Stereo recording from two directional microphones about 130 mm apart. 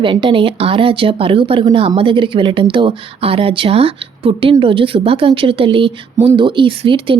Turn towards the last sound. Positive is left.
turn(degrees=-45)  # may be behind; listen again after turning